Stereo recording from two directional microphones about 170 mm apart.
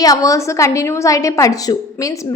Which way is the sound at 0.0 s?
20° left (ahead or behind).